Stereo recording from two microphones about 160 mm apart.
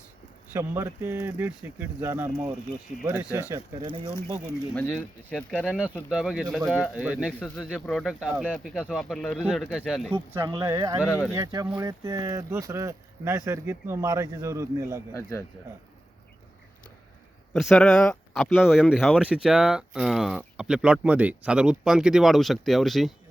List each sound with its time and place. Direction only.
0.5 s speech: 15° right (ahead or behind)
4.7 s speech: 5° left (ahead or behind)
7.3 s speech: 5° left (ahead or behind)
10.7 s speech: 20° right (ahead or behind)
11.0 s speech: 10° left (ahead or behind)
11.3 s speech: 20° right (ahead or behind)
15.1 s speech: 15° left (ahead or behind)
17.5 s speech: centre (ahead or behind)